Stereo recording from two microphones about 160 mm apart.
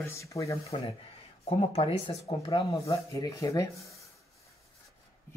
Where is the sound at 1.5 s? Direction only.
35° left (ahead or behind).